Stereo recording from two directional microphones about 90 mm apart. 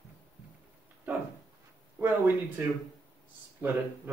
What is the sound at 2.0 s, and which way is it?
Speech, 20° right (ahead or behind).